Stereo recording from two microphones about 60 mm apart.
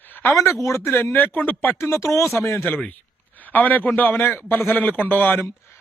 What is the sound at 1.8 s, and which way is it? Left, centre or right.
Speech, left.